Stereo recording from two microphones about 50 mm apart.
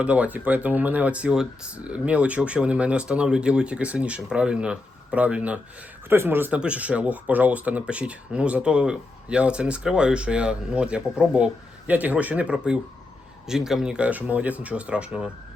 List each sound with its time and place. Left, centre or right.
0.0 s speech: right
1.3 s speech: centre
1.8 s speech: right
6.1 s speech: right
6.5 s speech: right
11.9 s speech: right
13.5 s speech: centre
14.0 s speech: right